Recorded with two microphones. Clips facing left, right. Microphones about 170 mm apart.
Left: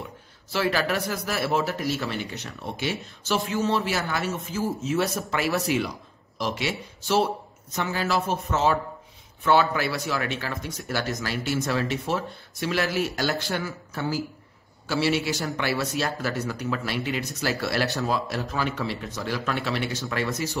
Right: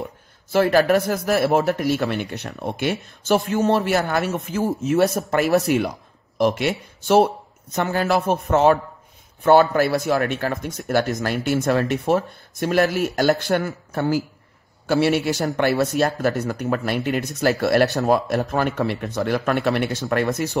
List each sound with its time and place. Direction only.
0.5 s speech: 50° right (ahead or behind)